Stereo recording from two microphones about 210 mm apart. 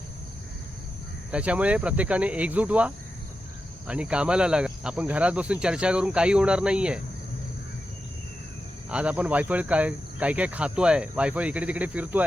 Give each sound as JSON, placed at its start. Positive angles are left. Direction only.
{"t": 1.3, "sound": "speech", "side_deg": -5}
{"t": 8.9, "sound": "speech", "side_deg": -5}